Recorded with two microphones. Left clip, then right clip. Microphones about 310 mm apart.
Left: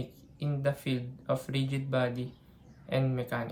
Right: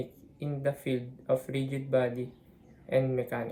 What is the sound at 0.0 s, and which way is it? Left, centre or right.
Speech, left.